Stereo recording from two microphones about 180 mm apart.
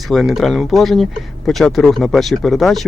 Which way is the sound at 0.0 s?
Centre (ahead or behind).